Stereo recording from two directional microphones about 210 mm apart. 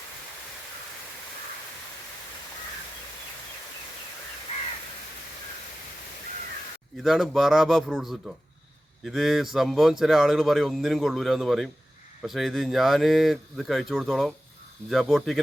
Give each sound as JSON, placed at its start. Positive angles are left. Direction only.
{"t": 6.9, "sound": "speech", "side_deg": 0}